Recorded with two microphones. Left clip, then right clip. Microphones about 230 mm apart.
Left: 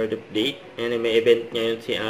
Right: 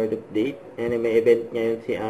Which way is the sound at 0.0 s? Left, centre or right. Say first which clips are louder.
Even; left.